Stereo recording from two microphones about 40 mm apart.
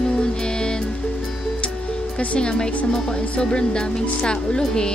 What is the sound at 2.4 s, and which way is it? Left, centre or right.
Speech, left.